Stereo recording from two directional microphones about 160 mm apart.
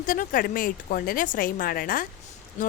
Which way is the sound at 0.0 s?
60° left (ahead or behind).